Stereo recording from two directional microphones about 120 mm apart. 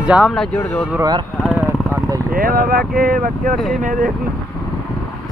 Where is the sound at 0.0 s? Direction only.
10° right (ahead or behind).